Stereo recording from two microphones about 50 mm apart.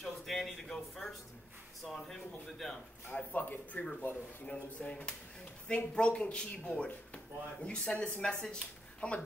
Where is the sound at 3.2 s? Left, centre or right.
Left.